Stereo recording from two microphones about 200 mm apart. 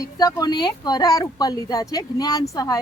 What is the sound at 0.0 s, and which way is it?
Speech, 20° left (ahead or behind).